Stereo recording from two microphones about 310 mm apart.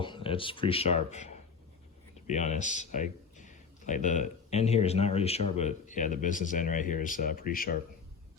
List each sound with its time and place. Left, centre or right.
0.0 s speech: centre